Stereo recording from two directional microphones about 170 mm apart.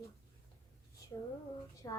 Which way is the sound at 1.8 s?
20° left (ahead or behind).